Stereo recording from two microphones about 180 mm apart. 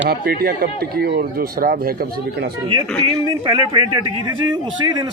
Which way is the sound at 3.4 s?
25° right (ahead or behind).